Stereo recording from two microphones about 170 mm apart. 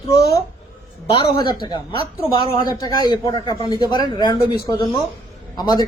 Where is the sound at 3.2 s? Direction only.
25° left (ahead or behind).